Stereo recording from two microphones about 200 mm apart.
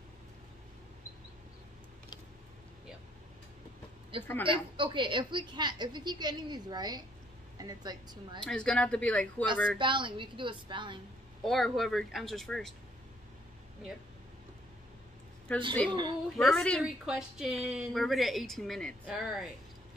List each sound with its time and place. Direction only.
4.1 s a woman's voice: 25° right (ahead or behind)
8.5 s a woman's voice: 5° left (ahead or behind)
9.8 s a woman's voice: 25° right (ahead or behind)
11.4 s a woman's voice: centre (ahead or behind)
15.5 s a woman's voice: 5° left (ahead or behind)
15.9 s a woman's voice: 25° right (ahead or behind)
16.3 s a woman's voice: centre (ahead or behind)